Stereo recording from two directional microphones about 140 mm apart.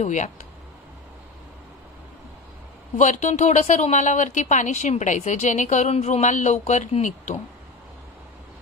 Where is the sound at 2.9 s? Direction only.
60° left (ahead or behind).